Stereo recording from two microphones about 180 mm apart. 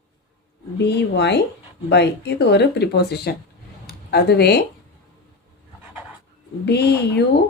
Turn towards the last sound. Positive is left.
turn(degrees=65)  # may be behind; listen again after turning